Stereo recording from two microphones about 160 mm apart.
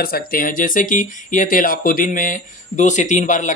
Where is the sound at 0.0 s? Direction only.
65° left (ahead or behind).